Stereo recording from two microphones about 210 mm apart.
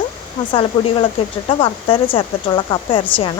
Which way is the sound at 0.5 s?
25° left (ahead or behind).